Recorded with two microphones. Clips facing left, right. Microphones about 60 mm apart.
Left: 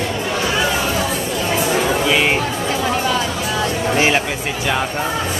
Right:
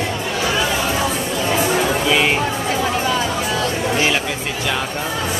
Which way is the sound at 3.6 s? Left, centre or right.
Left.